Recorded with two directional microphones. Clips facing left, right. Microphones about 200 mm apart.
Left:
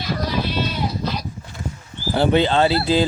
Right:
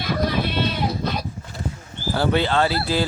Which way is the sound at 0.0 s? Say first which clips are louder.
Right 1 dB; 55° right (ahead or behind).